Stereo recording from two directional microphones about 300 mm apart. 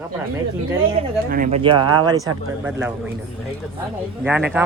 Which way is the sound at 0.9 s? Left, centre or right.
Right.